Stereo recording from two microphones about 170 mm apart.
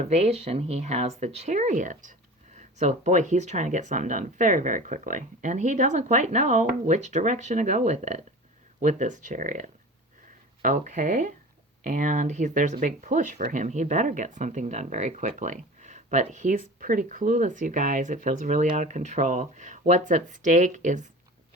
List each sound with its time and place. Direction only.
0.0 s speech: 40° right (ahead or behind)